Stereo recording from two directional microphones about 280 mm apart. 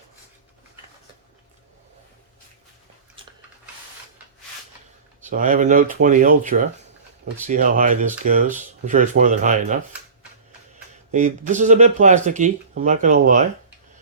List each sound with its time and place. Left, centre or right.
5.2 s speech: right
11.1 s speech: right